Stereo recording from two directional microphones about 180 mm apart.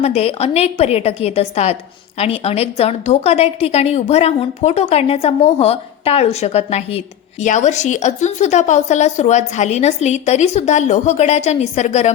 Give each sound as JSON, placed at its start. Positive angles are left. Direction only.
{"t": 0.0, "sound": "a woman's voice", "side_deg": 35}